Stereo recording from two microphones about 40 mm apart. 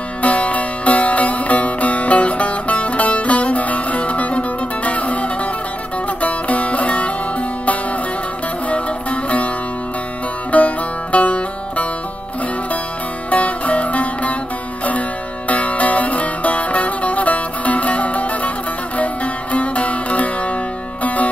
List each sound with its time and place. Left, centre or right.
0.2 s music: left
8.6 s music: left
10.5 s music: left
13.3 s music: left